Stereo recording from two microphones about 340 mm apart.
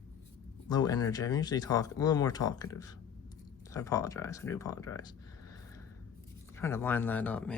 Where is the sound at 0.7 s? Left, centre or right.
Centre.